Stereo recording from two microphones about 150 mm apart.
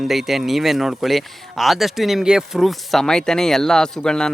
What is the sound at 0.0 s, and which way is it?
Speech, centre (ahead or behind).